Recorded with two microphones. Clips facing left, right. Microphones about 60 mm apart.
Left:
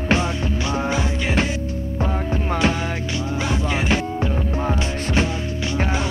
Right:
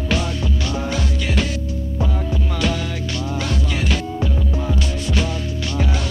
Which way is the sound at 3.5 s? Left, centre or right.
Left.